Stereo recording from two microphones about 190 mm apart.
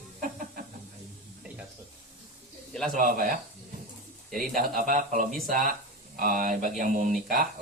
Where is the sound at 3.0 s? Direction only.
50° right (ahead or behind).